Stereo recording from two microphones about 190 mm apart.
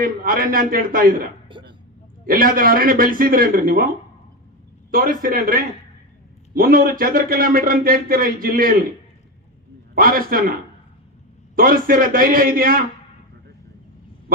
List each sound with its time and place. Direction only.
0.0 s a man's voice: 50° right (ahead or behind)
1.5 s a sound: 25° right (ahead or behind)
2.2 s a man's voice: 50° right (ahead or behind)
4.9 s a man's voice: 50° right (ahead or behind)
9.9 s a man's voice: 50° right (ahead or behind)
11.5 s a man's voice: 50° right (ahead or behind)
14.3 s a sound: 50° right (ahead or behind)